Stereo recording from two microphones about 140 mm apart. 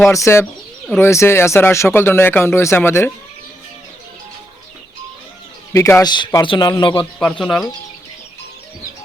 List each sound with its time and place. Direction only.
0.1 s speech: 20° left (ahead or behind)
5.7 s a man's voice: 20° left (ahead or behind)
7.2 s speech: 5° left (ahead or behind)